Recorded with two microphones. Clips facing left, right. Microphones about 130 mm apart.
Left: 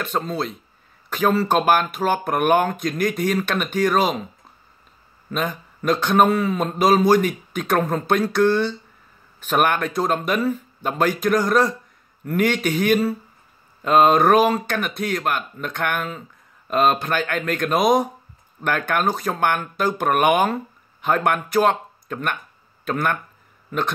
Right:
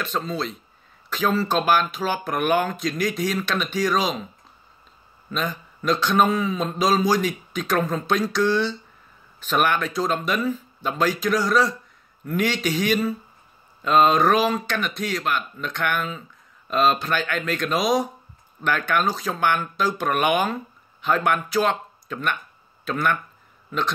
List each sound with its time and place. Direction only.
0.0 s speech: 55° left (ahead or behind)
5.3 s speech: 55° left (ahead or behind)